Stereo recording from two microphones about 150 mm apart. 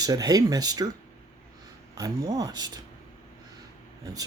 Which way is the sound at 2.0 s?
25° right (ahead or behind).